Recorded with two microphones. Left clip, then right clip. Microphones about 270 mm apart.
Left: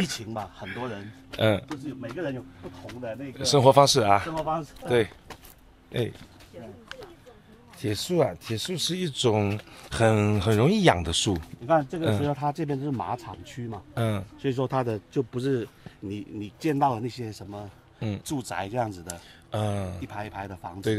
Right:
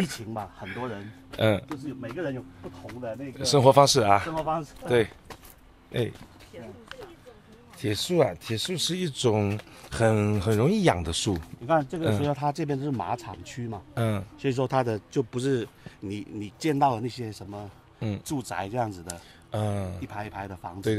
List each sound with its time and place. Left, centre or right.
0.0 s a man's voice: centre
7.8 s a man's voice: centre
12.9 s speech: right
13.4 s speech: centre
13.9 s a man's voice: centre
14.7 s a man's voice: centre